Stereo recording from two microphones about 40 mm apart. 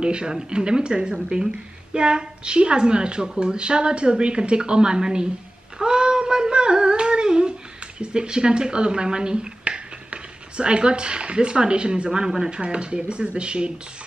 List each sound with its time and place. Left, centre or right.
0.0 s a woman's voice: right
5.8 s humming: right
8.0 s a woman's voice: right